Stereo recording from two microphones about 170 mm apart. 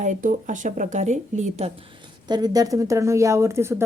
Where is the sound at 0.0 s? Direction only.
50° right (ahead or behind).